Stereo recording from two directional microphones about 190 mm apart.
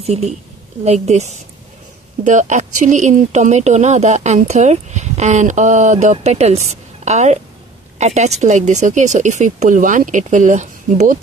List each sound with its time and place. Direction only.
0.0 s speech: 35° right (ahead or behind)